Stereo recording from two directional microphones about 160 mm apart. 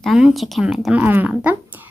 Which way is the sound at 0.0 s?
5° right (ahead or behind).